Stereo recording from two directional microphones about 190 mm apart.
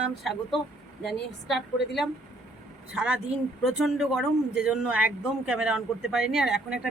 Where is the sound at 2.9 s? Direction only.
5° right (ahead or behind).